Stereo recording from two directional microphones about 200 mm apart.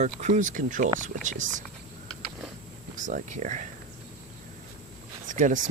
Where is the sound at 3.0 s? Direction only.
40° right (ahead or behind).